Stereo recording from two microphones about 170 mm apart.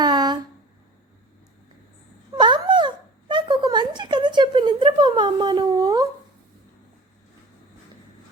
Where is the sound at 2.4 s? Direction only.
25° right (ahead or behind).